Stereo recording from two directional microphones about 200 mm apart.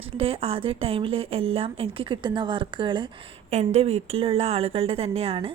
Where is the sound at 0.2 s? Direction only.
30° right (ahead or behind).